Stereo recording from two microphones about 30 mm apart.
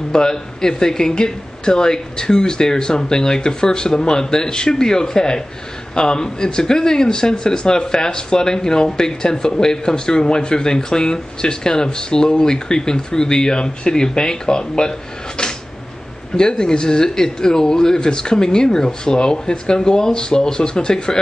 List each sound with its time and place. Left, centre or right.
0.1 s speech: left